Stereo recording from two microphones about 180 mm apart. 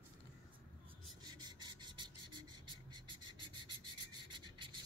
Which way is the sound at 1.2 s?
25° right (ahead or behind).